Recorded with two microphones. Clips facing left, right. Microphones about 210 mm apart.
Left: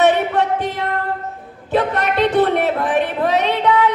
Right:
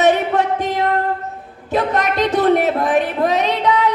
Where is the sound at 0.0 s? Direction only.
40° right (ahead or behind).